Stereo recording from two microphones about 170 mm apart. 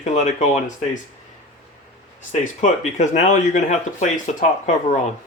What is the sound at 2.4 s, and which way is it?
Speech, 45° left (ahead or behind).